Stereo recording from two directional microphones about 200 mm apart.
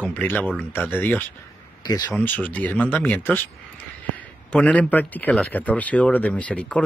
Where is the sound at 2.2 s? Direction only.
10° left (ahead or behind).